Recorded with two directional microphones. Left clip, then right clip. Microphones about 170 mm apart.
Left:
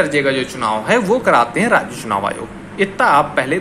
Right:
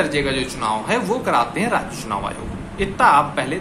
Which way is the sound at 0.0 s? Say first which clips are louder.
Left 5 dB; 20° left (ahead or behind).